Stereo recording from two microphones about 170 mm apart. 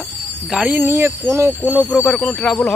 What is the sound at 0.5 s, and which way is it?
Speech, 10° right (ahead or behind).